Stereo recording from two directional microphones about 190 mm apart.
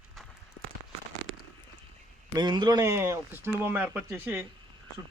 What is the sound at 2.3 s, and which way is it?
Speech, 20° right (ahead or behind).